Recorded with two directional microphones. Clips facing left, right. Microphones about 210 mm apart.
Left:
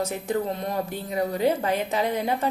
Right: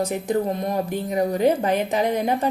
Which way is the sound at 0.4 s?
15° right (ahead or behind).